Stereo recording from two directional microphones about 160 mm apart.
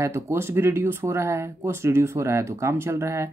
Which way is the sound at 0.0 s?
15° right (ahead or behind).